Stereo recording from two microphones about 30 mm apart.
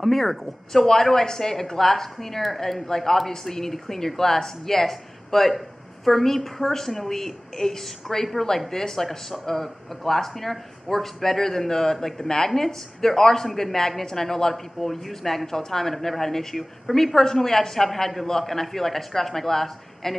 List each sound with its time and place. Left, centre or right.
0.0 s speech: centre
2.9 s speech: centre